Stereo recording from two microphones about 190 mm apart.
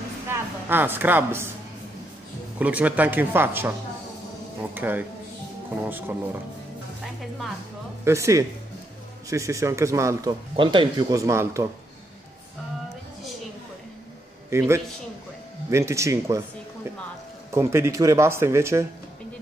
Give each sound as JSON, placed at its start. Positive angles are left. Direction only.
{"t": 0.3, "sound": "a woman's voice", "side_deg": -10}
{"t": 2.6, "sound": "speech", "side_deg": -10}
{"t": 4.7, "sound": "speech", "side_deg": -10}
{"t": 8.0, "sound": "speech", "side_deg": -15}
{"t": 10.5, "sound": "speech", "side_deg": -25}
{"t": 14.5, "sound": "a man's voice", "side_deg": -15}
{"t": 17.5, "sound": "speech", "side_deg": -15}